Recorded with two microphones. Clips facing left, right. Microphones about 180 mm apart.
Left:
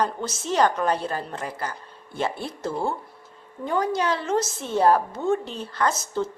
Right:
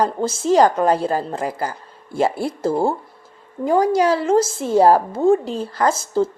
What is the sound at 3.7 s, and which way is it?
Speech, 35° right (ahead or behind).